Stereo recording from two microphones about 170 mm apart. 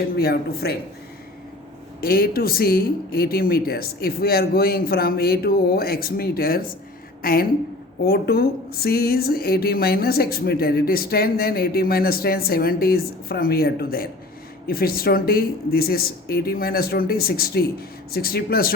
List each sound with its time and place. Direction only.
0.2 s speech: 65° left (ahead or behind)
2.0 s speech: 60° left (ahead or behind)